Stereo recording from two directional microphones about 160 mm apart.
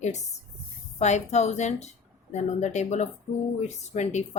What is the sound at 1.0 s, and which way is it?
A woman's voice, 45° left (ahead or behind).